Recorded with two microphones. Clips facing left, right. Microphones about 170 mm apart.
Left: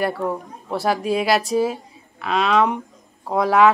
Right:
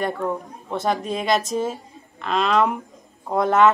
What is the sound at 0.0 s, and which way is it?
Speech, 5° left (ahead or behind).